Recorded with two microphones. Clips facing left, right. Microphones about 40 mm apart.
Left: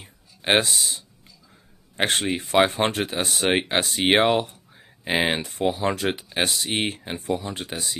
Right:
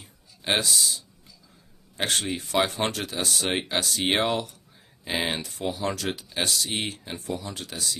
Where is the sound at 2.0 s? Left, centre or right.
Left.